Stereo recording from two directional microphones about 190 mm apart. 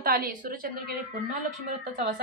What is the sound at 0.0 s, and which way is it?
Speech, 45° right (ahead or behind).